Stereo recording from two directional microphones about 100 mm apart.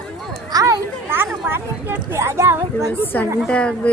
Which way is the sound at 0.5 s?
35° right (ahead or behind).